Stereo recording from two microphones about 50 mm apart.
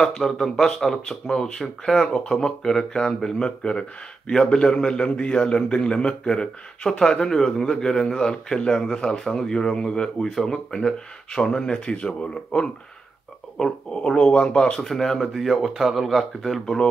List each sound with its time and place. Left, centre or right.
0.0 s speech: centre
14.8 s speech: centre